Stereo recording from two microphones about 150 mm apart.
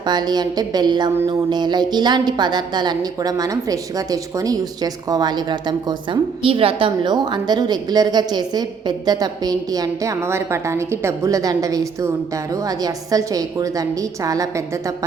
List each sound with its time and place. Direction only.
0.0 s a woman's voice: 30° right (ahead or behind)